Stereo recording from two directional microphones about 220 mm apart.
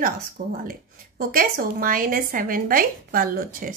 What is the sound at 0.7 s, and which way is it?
A woman's voice, 40° right (ahead or behind).